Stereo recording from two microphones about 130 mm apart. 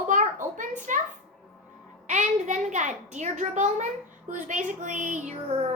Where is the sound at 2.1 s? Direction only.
65° right (ahead or behind).